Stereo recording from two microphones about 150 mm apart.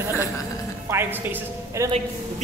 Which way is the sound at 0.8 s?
15° right (ahead or behind).